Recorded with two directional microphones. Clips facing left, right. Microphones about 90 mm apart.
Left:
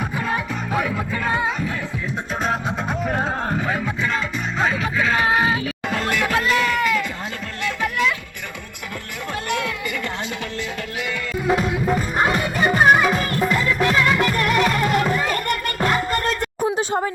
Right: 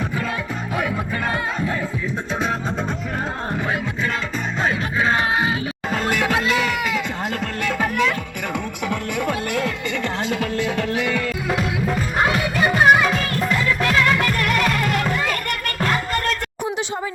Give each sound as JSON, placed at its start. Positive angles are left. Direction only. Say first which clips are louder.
{"t": 4.9, "sound": "a sound", "louder": "left 1 dB", "side_deg": -30}
{"t": 5.9, "sound": "music", "louder": "right 1 dB", "side_deg": -45}
{"t": 11.4, "sound": "music", "louder": "left 7 dB", "side_deg": 0}
{"t": 14.2, "sound": "music", "louder": "left 2 dB", "side_deg": 20}